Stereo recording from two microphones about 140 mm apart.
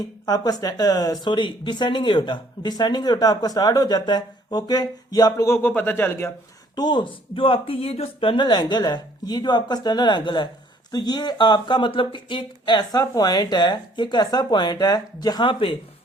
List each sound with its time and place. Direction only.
0.0 s speech: 25° left (ahead or behind)
6.7 s speech: 30° left (ahead or behind)